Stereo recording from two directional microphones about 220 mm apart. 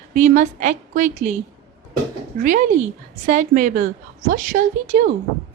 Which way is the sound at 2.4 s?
35° right (ahead or behind).